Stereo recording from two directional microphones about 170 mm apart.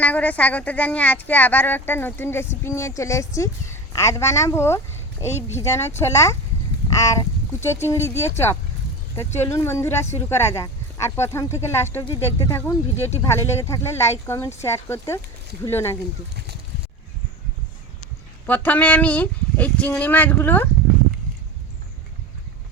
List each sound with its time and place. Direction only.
0.0 s speech: 10° left (ahead or behind)
18.4 s speech: 10° left (ahead or behind)